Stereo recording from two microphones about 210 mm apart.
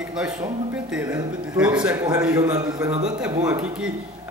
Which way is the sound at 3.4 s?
5° right (ahead or behind).